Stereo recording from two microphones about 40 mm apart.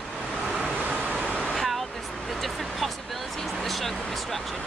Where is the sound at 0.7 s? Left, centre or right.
Right.